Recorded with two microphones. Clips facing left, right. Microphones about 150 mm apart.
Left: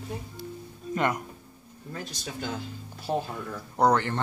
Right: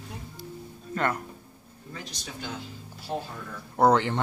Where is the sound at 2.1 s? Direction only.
50° left (ahead or behind).